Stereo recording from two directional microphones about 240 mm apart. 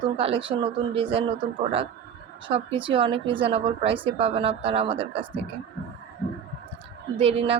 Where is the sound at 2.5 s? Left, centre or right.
Right.